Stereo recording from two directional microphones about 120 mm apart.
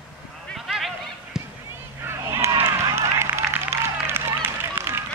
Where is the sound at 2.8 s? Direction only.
25° right (ahead or behind).